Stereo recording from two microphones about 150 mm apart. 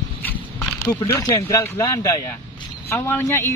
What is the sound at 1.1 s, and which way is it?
A man's voice, 20° left (ahead or behind).